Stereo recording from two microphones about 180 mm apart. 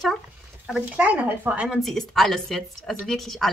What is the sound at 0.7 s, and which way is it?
Speech, 5° right (ahead or behind).